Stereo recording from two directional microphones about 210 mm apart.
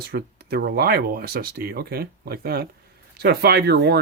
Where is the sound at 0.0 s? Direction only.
50° right (ahead or behind).